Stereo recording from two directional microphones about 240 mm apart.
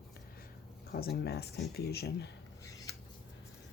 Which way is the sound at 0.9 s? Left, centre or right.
Left.